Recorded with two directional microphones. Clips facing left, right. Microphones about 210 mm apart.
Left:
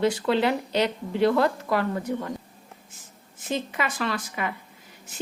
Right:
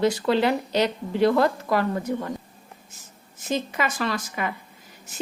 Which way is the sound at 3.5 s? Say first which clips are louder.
Right 2 dB; 40° right (ahead or behind).